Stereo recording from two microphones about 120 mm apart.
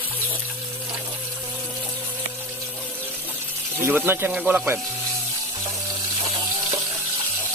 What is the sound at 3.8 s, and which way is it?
Speech, 20° right (ahead or behind).